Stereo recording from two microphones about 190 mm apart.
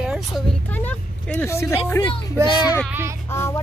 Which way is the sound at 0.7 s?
10° left (ahead or behind).